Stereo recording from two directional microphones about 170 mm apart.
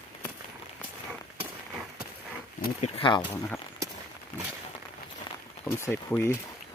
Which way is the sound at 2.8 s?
30° left (ahead or behind).